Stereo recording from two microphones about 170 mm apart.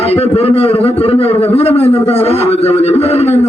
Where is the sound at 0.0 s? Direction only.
35° left (ahead or behind).